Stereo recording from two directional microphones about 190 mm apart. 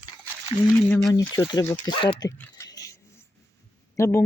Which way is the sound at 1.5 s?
20° left (ahead or behind).